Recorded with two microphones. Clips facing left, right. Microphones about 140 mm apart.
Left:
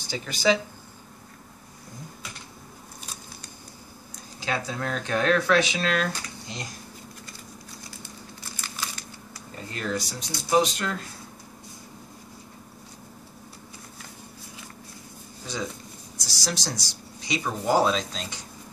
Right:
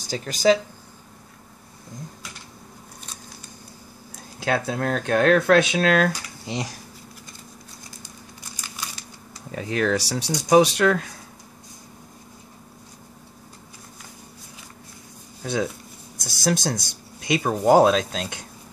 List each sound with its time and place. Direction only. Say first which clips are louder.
0.0 s speech: right 4 dB; 40° right (ahead or behind)
4.5 s speech: right 6 dB; 55° right (ahead or behind); by 6.8 s 80° right
9.5 s speech: right 8 dB; 85° right
16.2 s speech: right 9 dB; 50° right (ahead or behind)